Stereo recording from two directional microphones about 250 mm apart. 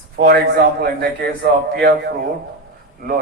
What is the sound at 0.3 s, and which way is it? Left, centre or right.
A man's voice, right.